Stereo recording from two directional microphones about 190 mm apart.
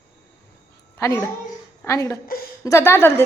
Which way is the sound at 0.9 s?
15° left (ahead or behind).